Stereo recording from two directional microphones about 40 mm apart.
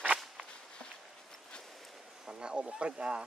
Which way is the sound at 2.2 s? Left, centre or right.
Right.